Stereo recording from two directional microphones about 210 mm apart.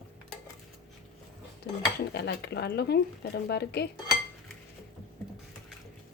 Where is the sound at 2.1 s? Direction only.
50° left (ahead or behind).